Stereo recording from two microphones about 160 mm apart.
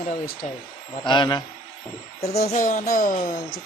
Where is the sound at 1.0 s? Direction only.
30° left (ahead or behind).